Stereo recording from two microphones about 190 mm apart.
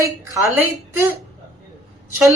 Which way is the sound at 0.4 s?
5° right (ahead or behind).